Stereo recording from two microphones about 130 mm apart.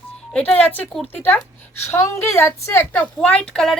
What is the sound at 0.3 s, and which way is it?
A woman's voice, 10° left (ahead or behind).